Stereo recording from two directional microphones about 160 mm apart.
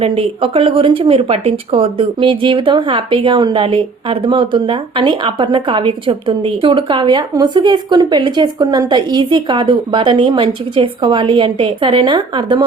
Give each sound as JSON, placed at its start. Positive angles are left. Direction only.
{"t": 0.0, "sound": "speech", "side_deg": -35}